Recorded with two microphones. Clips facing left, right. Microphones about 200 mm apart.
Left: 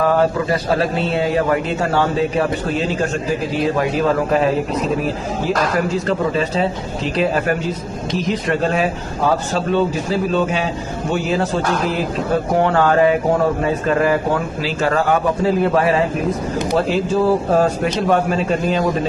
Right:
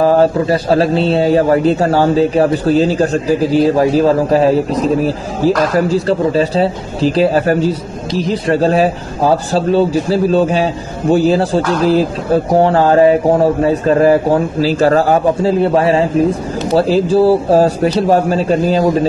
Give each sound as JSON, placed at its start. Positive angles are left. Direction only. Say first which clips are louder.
{"t": 0.0, "sound": "a man's voice", "louder": "right 5 dB", "side_deg": -30}